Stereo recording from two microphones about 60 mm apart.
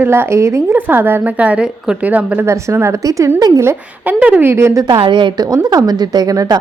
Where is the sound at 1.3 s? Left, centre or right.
Right.